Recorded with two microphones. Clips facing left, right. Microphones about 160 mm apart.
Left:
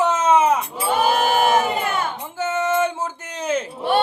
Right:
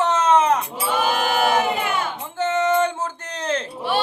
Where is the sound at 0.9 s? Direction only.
45° left (ahead or behind).